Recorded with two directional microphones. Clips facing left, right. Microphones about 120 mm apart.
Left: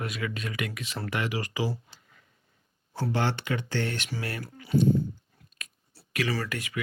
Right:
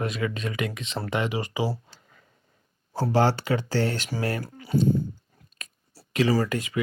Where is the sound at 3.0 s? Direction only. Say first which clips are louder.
Right 6 dB; 35° right (ahead or behind).